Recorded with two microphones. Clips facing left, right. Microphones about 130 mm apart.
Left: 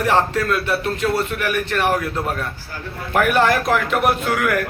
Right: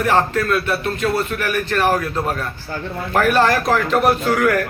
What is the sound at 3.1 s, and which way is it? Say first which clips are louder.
A man's voice: right 1 dB; 15° left (ahead or behind).